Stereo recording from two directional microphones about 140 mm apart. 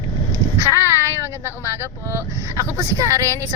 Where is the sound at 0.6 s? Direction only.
20° right (ahead or behind).